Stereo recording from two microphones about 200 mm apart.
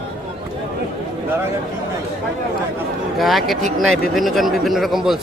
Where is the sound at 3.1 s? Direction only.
Centre (ahead or behind).